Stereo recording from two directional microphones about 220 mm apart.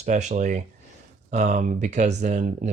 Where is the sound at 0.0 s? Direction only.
30° right (ahead or behind).